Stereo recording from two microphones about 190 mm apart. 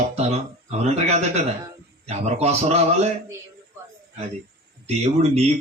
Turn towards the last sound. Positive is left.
turn(degrees=-35)  # may be behind; listen again after turning